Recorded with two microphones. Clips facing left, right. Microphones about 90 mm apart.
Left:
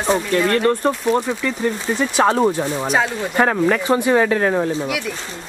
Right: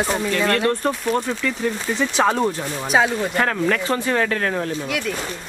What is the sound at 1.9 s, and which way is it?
Speech, 5° left (ahead or behind).